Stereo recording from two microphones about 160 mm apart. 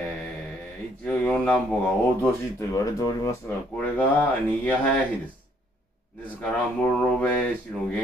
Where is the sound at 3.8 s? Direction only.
10° left (ahead or behind).